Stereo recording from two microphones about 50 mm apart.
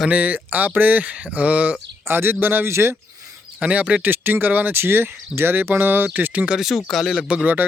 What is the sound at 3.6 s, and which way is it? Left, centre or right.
Speech, right.